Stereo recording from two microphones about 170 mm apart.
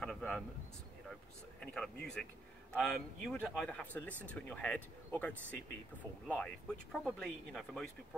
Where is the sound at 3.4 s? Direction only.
5° left (ahead or behind).